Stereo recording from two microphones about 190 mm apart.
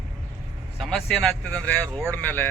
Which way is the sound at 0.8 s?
Centre (ahead or behind).